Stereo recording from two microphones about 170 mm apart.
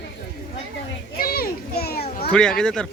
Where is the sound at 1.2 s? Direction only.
60° left (ahead or behind).